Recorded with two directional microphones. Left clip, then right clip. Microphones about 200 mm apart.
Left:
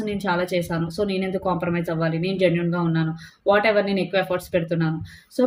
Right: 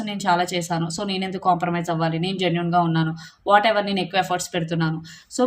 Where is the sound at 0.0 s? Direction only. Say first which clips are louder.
Right 3 dB; 25° right (ahead or behind).